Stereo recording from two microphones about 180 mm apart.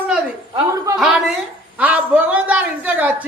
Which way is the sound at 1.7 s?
10° right (ahead or behind).